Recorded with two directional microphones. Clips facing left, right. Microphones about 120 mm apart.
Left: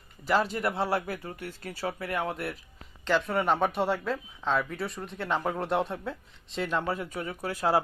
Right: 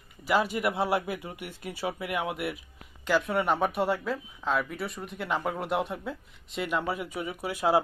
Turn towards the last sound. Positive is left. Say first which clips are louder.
# right 1 dB
turn(degrees=-15)  # may be behind; listen again after turning